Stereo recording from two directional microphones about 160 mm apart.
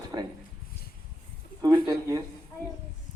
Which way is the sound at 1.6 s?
25° right (ahead or behind).